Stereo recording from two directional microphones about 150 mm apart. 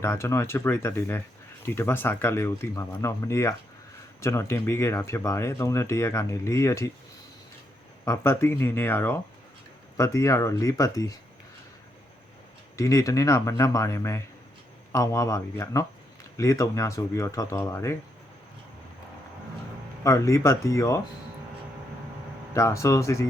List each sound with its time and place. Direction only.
0.0 s speech: 20° left (ahead or behind)
8.0 s speech: 20° left (ahead or behind)
12.7 s speech: 20° left (ahead or behind)
20.1 s speech: 20° left (ahead or behind)
22.5 s speech: 20° left (ahead or behind)